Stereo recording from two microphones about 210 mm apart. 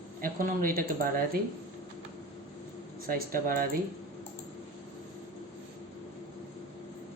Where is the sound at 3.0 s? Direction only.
40° right (ahead or behind).